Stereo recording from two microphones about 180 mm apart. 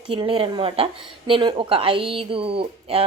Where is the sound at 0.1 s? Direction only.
30° right (ahead or behind).